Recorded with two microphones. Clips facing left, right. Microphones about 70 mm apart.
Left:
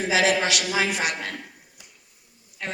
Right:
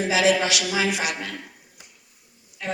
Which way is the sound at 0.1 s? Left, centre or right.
Left.